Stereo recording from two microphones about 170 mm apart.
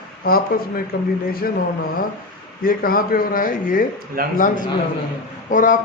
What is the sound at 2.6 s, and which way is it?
Speech, 60° left (ahead or behind).